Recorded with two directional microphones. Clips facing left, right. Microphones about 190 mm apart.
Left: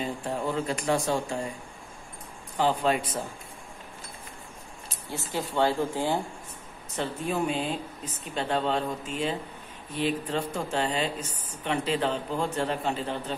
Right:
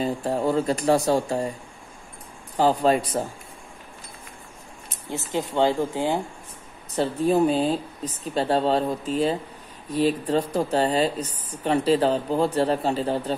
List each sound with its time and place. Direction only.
0.0 s speech: 35° right (ahead or behind)
2.5 s a woman's voice: 40° right (ahead or behind)
4.8 s speech: 20° right (ahead or behind)
7.0 s a woman's voice: 35° right (ahead or behind)